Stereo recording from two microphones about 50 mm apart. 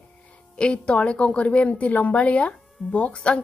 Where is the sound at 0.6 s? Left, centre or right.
Left.